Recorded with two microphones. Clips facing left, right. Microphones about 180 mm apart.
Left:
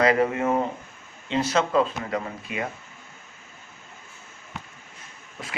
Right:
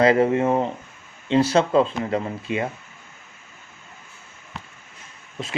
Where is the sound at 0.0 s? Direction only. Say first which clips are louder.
Right 4 dB; 30° right (ahead or behind).